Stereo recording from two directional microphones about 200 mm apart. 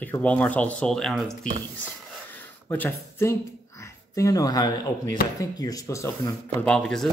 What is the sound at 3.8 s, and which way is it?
Speech, 15° left (ahead or behind).